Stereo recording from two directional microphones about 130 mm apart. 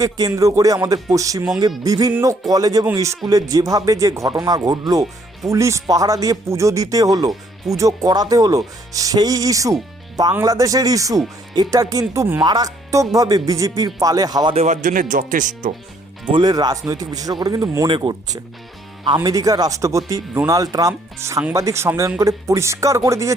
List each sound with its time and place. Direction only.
0.0 s speech: 25° right (ahead or behind)
14.5 s speech: 65° right (ahead or behind); by 15.7 s 80° right
16.2 s speech: 35° right (ahead or behind)